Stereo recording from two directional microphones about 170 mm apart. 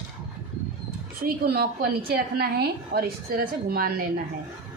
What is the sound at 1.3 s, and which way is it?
A woman's voice, 65° right (ahead or behind).